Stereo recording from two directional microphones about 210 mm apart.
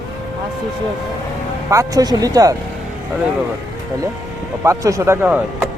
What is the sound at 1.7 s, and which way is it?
Speech, 15° right (ahead or behind).